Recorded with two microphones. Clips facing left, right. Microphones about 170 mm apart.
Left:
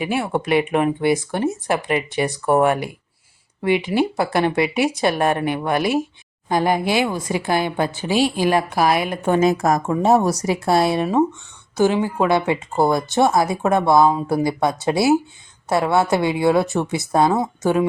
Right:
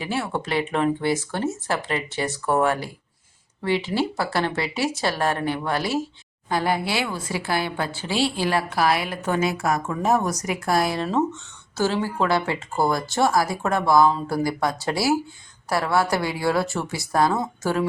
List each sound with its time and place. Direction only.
0.0 s speech: 15° left (ahead or behind)
9.4 s speech: 40° left (ahead or behind)
9.8 s speech: 25° left (ahead or behind)
11.0 s speech: 15° left (ahead or behind)